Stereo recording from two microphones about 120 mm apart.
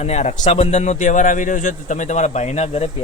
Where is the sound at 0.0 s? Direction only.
65° left (ahead or behind).